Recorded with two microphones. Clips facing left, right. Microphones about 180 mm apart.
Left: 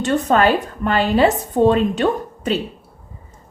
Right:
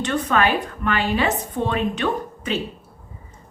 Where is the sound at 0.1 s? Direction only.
35° left (ahead or behind).